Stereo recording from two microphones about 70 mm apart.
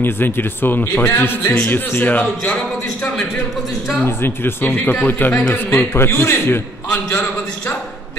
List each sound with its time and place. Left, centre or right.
0.0 s a man's voice: left
4.0 s a man's voice: left